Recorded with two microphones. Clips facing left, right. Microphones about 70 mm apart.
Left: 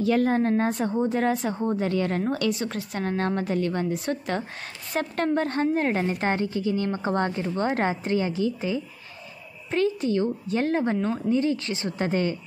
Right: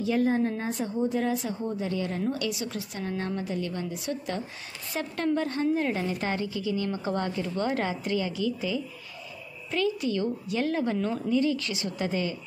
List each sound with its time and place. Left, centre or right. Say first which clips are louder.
0.0 s a woman's voice: left 3 dB; left